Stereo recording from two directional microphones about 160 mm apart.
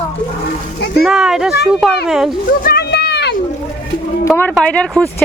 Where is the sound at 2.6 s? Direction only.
80° left.